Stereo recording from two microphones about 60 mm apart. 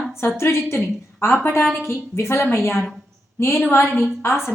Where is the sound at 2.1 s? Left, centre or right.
Left.